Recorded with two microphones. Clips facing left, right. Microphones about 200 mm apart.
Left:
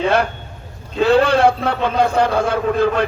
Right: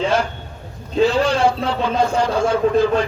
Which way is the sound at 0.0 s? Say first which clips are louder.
Left 2 dB; 60° left (ahead or behind).